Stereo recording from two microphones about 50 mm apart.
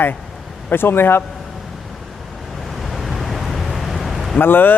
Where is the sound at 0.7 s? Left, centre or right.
Left.